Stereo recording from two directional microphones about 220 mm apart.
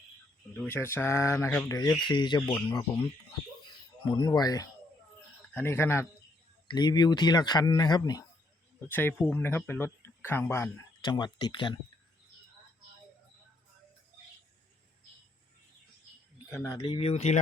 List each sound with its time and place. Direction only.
0.5 s speech: 10° left (ahead or behind)
4.0 s speech: 20° left (ahead or behind)
16.5 s speech: 10° left (ahead or behind); by 17.4 s 30° left (ahead or behind)